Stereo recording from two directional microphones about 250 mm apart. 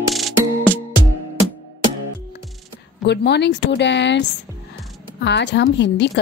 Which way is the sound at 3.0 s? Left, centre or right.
Left.